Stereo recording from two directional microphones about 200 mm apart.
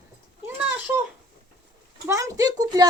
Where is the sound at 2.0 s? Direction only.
15° right (ahead or behind).